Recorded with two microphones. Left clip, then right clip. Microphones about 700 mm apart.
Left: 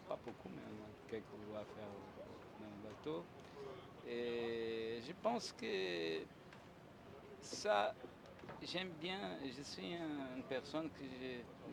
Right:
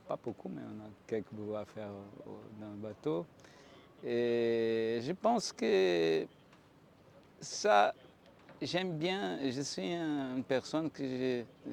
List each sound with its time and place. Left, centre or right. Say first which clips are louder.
0.1 s pigeon: right 7 dB; right
1.1 s speech: right 11 dB; right
3.0 s speech: right 10 dB; right
7.6 s speech: right 10 dB; right